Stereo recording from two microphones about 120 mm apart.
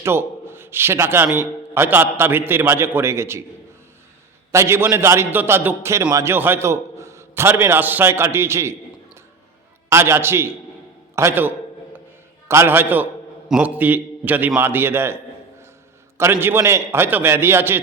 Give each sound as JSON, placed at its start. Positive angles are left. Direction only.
{"t": 0.0, "sound": "a man's voice", "side_deg": -20}
{"t": 4.5, "sound": "a man's voice", "side_deg": -20}
{"t": 9.9, "sound": "a man's voice", "side_deg": -20}